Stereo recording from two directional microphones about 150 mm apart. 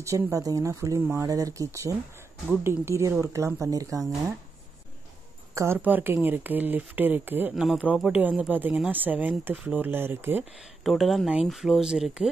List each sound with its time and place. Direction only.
0.0 s speech: 20° right (ahead or behind)
5.5 s speech: 20° right (ahead or behind)
10.8 s speech: centre (ahead or behind)